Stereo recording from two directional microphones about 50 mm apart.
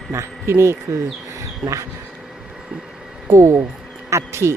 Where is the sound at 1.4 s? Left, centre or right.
Right.